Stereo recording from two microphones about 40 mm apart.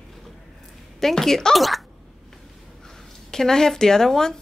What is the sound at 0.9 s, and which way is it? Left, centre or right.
Speech, centre.